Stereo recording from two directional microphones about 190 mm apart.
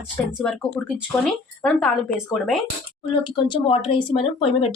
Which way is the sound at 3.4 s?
25° left (ahead or behind).